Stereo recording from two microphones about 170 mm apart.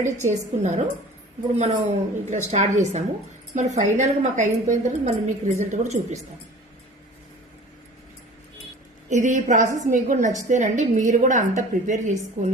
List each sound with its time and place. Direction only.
0.3 s a woman's voice: 45° right (ahead or behind)
9.0 s a woman's voice: 45° right (ahead or behind)